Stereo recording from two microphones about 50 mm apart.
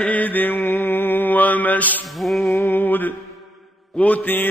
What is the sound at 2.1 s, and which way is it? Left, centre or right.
Music, centre.